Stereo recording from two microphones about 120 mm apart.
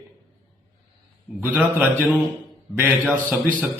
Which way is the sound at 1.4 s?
15° right (ahead or behind).